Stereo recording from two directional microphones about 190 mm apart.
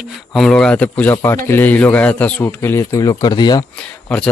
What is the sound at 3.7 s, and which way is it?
Speech, 5° left (ahead or behind).